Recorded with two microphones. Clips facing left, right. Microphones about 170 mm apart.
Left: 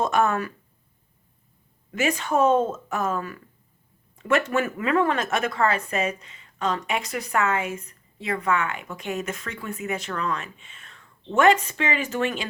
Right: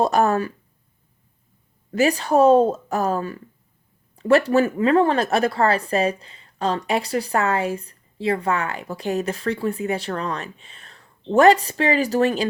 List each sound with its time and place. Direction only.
0.0 s speech: 35° right (ahead or behind)
1.9 s speech: 35° right (ahead or behind)